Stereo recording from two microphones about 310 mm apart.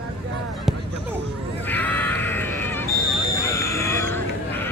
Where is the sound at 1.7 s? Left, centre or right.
Centre.